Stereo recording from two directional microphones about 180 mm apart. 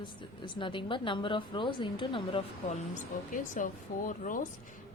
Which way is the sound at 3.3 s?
45° left (ahead or behind).